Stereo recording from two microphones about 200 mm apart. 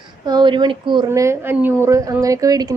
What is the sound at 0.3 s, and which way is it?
A woman's voice, 20° right (ahead or behind).